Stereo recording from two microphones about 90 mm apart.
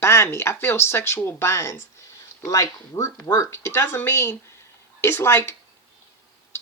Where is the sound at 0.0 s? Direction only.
30° left (ahead or behind).